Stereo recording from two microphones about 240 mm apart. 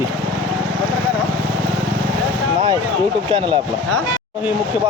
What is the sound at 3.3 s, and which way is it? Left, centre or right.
Speech, right.